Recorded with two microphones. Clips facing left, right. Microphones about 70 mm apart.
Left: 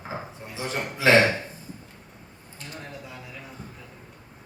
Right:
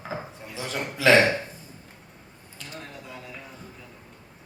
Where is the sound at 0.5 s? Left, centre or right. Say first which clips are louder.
Left 1 dB; left.